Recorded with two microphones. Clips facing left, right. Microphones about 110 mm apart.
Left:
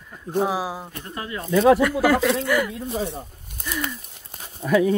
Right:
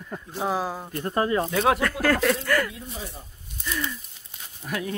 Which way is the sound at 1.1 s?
40° right (ahead or behind).